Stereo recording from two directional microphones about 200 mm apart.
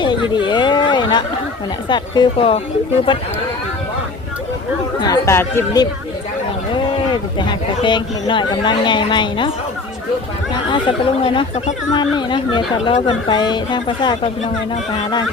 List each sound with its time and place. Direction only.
0.0 s chatter: 25° left (ahead or behind)
1.9 s speech: 25° left (ahead or behind)
4.9 s speech: 15° left (ahead or behind)
10.5 s speech: 25° left (ahead or behind)